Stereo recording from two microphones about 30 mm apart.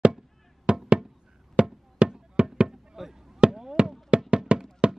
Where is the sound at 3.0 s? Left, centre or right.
Centre.